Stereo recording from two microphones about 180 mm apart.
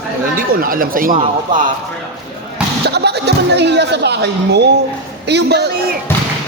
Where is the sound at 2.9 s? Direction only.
65° right (ahead or behind).